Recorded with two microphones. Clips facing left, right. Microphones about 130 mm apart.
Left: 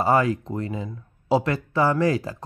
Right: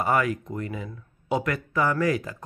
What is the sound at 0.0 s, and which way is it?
Speech, 30° left (ahead or behind).